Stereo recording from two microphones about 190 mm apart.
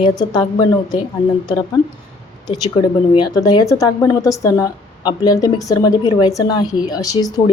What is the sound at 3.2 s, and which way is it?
Speech, 20° left (ahead or behind).